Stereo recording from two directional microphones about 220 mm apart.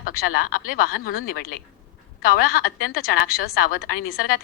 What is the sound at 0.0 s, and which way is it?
Speech, 40° left (ahead or behind).